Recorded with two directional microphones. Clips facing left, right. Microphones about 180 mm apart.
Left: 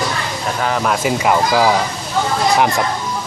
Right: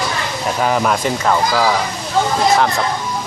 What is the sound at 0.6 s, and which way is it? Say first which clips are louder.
Speech: even; 5° right (ahead or behind).